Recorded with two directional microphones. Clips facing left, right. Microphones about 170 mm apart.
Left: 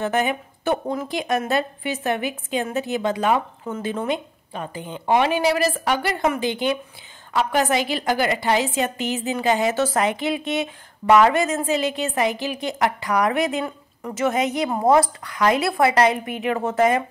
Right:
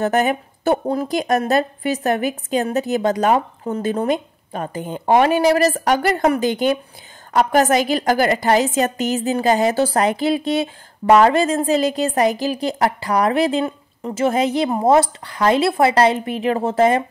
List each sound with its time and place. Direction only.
0.0 s a woman's voice: 40° right (ahead or behind)